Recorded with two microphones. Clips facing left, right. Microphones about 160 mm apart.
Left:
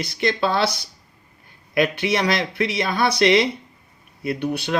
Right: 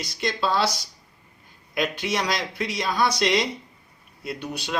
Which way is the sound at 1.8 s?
60° left (ahead or behind).